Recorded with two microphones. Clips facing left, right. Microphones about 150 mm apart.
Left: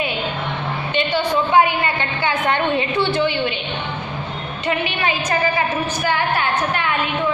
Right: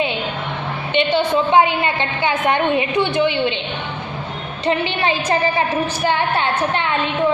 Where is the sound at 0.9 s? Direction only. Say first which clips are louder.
Right 3 dB; 20° right (ahead or behind).